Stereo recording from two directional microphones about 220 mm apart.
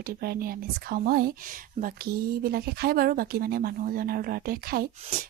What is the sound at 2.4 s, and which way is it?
A woman's voice, 45° right (ahead or behind).